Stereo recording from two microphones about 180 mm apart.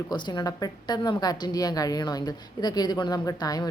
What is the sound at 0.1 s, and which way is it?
A woman's voice, 25° left (ahead or behind).